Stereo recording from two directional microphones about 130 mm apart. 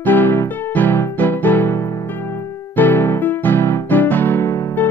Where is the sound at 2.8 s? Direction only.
15° left (ahead or behind).